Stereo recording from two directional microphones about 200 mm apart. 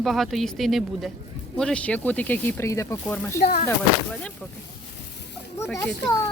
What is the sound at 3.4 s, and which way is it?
Speech, 45° left (ahead or behind).